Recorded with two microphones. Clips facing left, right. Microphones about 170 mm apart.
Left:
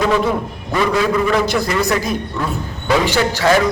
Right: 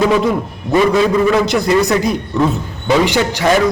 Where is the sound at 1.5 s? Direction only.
20° right (ahead or behind).